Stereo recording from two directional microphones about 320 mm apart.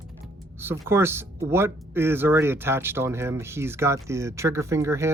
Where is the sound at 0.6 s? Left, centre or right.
Centre.